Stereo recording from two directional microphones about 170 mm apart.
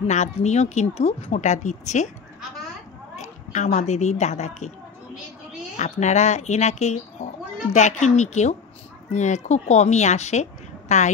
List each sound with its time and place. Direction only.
0.0 s speech: 40° left (ahead or behind)
3.2 s a child's voice: 45° left (ahead or behind)
5.8 s a woman's voice: 40° left (ahead or behind)